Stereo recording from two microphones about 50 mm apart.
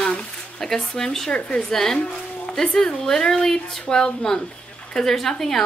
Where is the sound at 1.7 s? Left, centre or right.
Centre.